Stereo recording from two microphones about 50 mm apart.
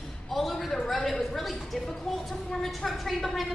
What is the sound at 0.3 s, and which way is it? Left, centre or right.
A man's voice, centre.